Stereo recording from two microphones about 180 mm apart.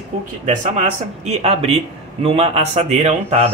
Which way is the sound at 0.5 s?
40° right (ahead or behind).